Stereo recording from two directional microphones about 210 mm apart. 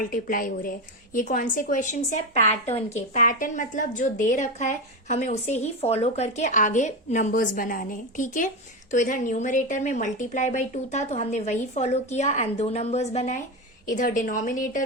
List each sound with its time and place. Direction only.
0.1 s a woman's voice: 40° left (ahead or behind)